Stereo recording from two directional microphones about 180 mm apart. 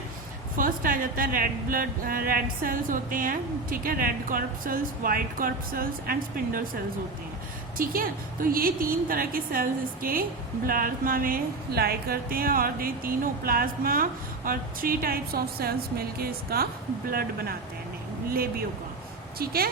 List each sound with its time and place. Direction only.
0.5 s a woman's voice: 50° right (ahead or behind)
7.8 s a woman's voice: 50° right (ahead or behind)